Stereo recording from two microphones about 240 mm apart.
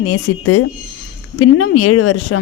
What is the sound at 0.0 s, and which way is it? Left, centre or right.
Speech, left.